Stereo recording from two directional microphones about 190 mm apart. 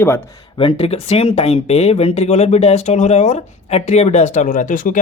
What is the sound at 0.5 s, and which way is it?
Speech, 30° left (ahead or behind).